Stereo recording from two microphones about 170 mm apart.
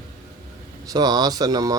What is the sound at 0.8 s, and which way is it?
Speech, 25° right (ahead or behind).